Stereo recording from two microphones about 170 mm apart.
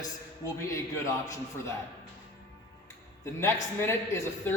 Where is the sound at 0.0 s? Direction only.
20° left (ahead or behind).